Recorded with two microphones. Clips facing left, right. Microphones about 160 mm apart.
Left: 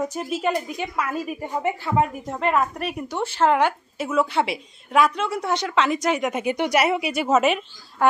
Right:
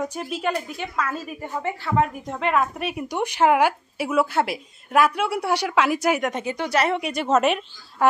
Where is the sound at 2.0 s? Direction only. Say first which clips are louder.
Left 1 dB; centre (ahead or behind).